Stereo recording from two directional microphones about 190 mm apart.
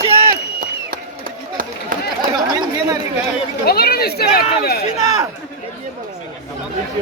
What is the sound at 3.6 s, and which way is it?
Speech, 55° left (ahead or behind).